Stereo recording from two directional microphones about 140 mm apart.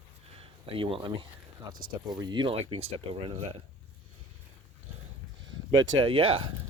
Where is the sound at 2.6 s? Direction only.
45° right (ahead or behind).